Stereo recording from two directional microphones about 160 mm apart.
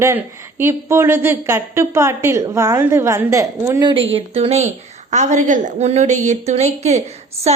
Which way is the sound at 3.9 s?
35° right (ahead or behind).